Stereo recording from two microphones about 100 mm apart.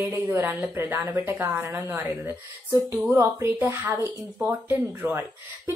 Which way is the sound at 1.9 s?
15° right (ahead or behind).